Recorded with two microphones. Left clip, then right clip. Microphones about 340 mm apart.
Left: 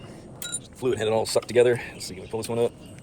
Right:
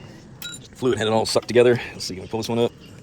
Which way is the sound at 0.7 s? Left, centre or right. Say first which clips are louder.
Right 3 dB; right.